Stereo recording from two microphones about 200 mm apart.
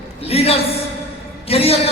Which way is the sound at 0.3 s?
30° left (ahead or behind).